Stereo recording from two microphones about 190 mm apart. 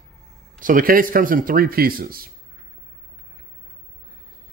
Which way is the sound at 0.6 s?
45° right (ahead or behind).